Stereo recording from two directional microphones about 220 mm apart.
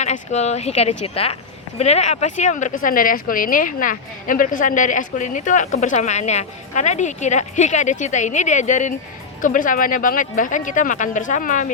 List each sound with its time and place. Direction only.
0.0 s speech: 30° left (ahead or behind)